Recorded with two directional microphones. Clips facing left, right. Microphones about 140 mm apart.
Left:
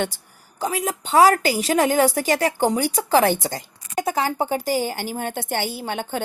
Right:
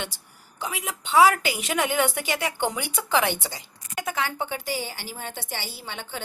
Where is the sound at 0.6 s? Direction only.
40° left (ahead or behind).